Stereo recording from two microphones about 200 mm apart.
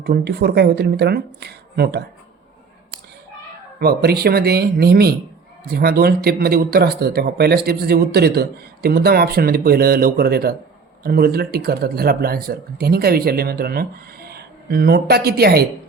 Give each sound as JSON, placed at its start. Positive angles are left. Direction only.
{"t": 0.0, "sound": "speech", "side_deg": -50}
{"t": 3.8, "sound": "speech", "side_deg": -50}